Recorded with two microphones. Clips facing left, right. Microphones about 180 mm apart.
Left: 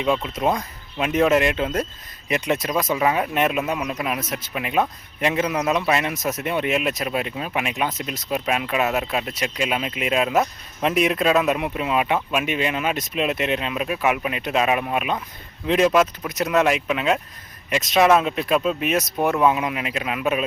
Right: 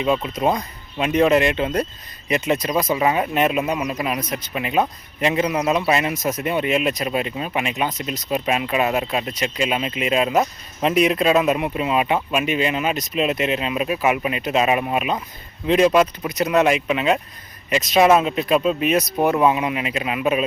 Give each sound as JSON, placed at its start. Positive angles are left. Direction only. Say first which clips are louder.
{"t": 0.0, "sound": "speech", "louder": "right 2 dB", "side_deg": 0}